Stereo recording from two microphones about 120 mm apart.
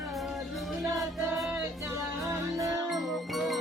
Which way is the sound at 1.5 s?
20° right (ahead or behind).